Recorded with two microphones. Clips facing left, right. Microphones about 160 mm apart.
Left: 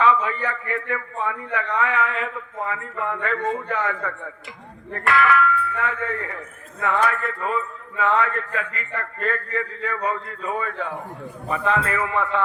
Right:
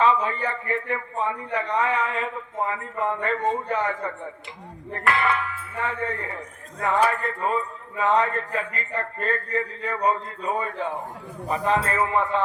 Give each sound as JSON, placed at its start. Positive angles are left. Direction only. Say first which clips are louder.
{"t": 0.0, "sound": "a man's voice", "louder": "left 1 dB", "side_deg": -35}
{"t": 5.1, "sound": "a man's voice", "louder": "left 10 dB", "side_deg": -30}